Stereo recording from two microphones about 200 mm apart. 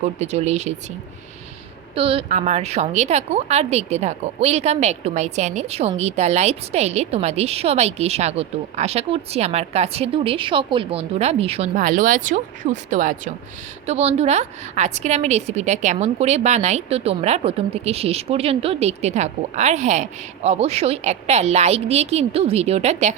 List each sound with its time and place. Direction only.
0.0 s a woman's voice: 35° right (ahead or behind)
2.0 s a woman's voice: 30° right (ahead or behind)